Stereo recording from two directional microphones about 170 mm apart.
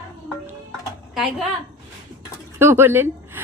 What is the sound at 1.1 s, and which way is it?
Speech, 5° right (ahead or behind).